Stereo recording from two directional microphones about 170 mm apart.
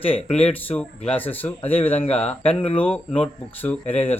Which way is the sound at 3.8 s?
35° left (ahead or behind).